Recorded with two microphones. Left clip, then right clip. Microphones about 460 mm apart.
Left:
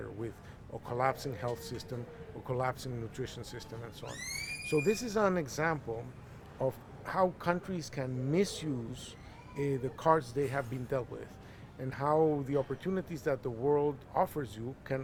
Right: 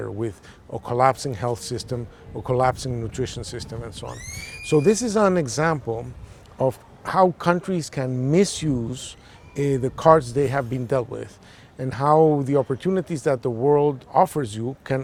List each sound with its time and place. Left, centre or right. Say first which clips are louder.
0.0 s speech: right 13 dB; right
6.6 s speech: right 12 dB; right